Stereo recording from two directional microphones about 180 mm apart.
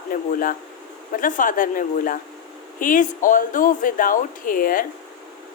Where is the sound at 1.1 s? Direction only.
45° left (ahead or behind).